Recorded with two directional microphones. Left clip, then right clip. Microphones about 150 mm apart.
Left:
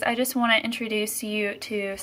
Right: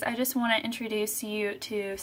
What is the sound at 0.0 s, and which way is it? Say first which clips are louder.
Speech: left 5 dB; 10° right (ahead or behind).